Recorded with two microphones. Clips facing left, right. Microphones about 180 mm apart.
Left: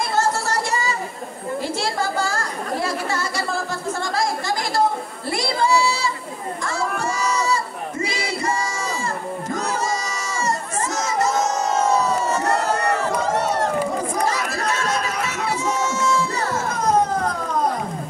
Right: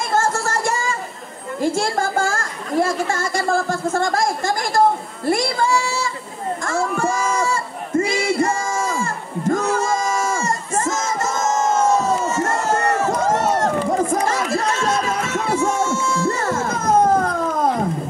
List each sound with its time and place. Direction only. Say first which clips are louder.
0.1 s music: right 3 dB; 50° right (ahead or behind)
1.6 s speech: right 6 dB; 50° right (ahead or behind)
5.3 s a sound: right 1 dB; 50° right (ahead or behind)
14.2 s crowd: right 3 dB; 50° right (ahead or behind)